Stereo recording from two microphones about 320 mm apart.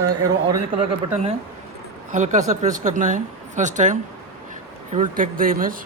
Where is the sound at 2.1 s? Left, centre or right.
Right.